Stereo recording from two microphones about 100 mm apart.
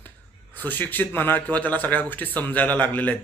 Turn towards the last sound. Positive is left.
turn(degrees=15)  # may be behind; listen again after turning